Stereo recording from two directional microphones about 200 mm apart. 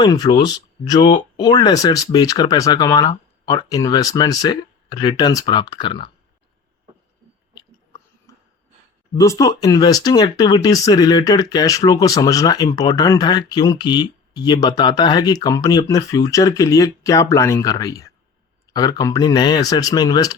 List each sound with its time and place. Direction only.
0.0 s speech: 20° left (ahead or behind)
8.3 s a sound: 15° left (ahead or behind)
9.1 s speech: 15° left (ahead or behind)